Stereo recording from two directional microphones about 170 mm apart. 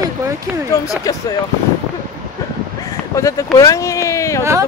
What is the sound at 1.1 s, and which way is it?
Speech, 20° left (ahead or behind).